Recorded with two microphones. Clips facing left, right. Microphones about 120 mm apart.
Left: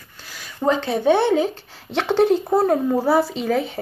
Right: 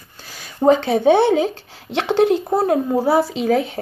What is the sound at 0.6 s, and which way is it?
Speech, 25° right (ahead or behind).